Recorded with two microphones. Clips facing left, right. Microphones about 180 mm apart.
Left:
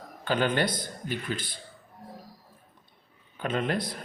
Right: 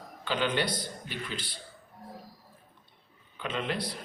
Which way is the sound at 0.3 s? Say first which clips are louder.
Left 3 dB; 50° left (ahead or behind).